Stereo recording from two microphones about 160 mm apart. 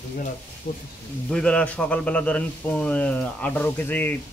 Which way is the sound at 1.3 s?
5° left (ahead or behind).